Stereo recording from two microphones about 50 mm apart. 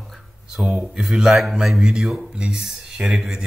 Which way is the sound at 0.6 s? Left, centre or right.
Centre.